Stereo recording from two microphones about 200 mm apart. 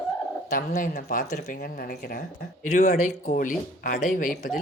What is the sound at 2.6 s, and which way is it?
Speech, 35° left (ahead or behind).